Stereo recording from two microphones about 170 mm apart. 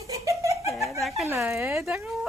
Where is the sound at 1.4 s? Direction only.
15° right (ahead or behind).